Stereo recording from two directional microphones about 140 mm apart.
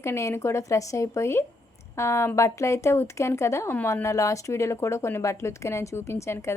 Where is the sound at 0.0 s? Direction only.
20° left (ahead or behind).